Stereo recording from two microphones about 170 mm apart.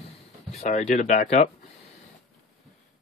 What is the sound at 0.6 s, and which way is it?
Speech, 45° left (ahead or behind).